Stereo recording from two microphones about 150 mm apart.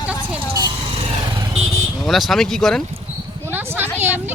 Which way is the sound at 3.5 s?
15° right (ahead or behind).